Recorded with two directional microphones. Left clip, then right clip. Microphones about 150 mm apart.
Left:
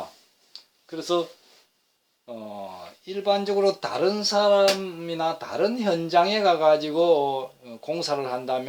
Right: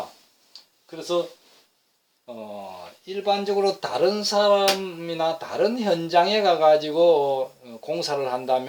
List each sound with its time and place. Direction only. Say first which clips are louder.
0.9 s speech: even; 50° left (ahead or behind)
3.1 s speech: even; 35° left (ahead or behind)